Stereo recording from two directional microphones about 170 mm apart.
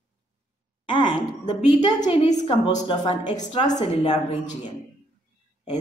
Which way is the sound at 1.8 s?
25° left (ahead or behind).